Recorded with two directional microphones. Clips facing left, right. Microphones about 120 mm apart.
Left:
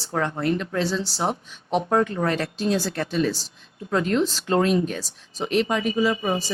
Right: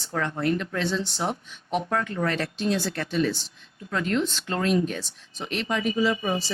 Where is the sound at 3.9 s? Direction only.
25° left (ahead or behind).